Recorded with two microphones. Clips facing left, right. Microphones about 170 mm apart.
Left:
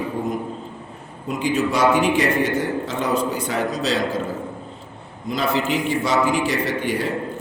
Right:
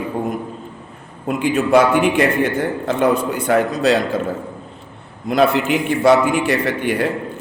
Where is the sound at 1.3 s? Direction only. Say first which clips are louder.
Right 6 dB; 55° right (ahead or behind).